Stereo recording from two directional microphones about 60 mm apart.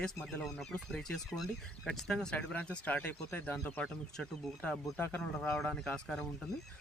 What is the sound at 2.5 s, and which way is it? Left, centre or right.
Speech, left.